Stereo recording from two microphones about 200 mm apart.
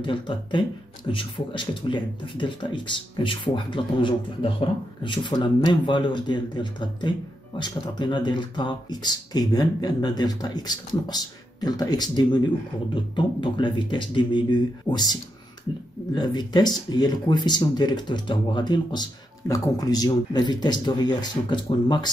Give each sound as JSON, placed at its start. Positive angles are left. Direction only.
{"t": 0.0, "sound": "a man's voice", "side_deg": 25}
{"t": 16.2, "sound": "a man's voice", "side_deg": 20}